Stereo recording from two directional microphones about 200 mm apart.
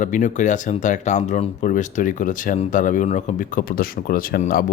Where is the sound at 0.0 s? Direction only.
40° left (ahead or behind).